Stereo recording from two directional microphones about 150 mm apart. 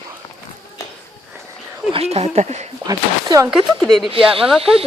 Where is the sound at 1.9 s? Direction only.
45° right (ahead or behind).